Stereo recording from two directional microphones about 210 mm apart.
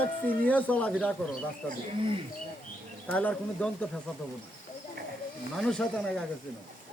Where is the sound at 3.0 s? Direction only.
5° left (ahead or behind).